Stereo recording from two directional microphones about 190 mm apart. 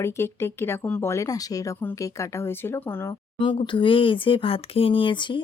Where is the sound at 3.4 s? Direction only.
25° left (ahead or behind).